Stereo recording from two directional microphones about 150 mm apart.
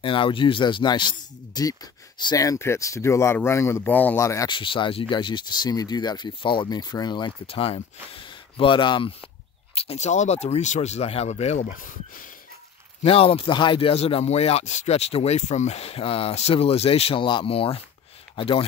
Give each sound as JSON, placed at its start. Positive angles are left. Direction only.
{"t": 0.0, "sound": "speech", "side_deg": 35}
{"t": 4.5, "sound": "speech", "side_deg": 35}
{"t": 9.8, "sound": "speech", "side_deg": 45}
{"t": 13.0, "sound": "speech", "side_deg": 40}